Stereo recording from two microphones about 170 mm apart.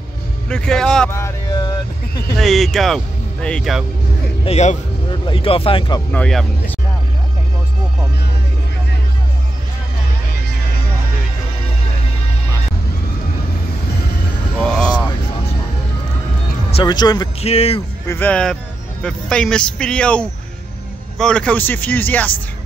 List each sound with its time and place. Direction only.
0.5 s speech: 5° left (ahead or behind)
1.1 s a sound: 20° left (ahead or behind)
2.3 s speech: centre (ahead or behind)
4.5 s speech: 40° left (ahead or behind)
6.1 s speech: 5° left (ahead or behind)
14.6 s vehicle: 5° left (ahead or behind)
16.7 s speech: 25° left (ahead or behind)
17.4 s speech: 35° left (ahead or behind)
18.0 s speech: 10° left (ahead or behind)